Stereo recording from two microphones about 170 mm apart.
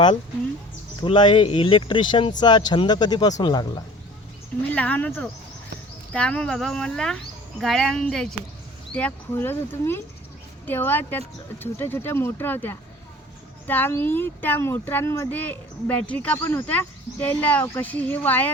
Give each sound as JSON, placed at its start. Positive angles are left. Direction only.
{"t": 1.0, "sound": "speech", "side_deg": 30}
{"t": 4.7, "sound": "speech", "side_deg": 10}